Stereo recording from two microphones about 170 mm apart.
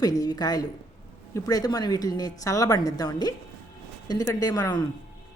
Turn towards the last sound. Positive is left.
turn(degrees=20)  # may be behind; listen again after turning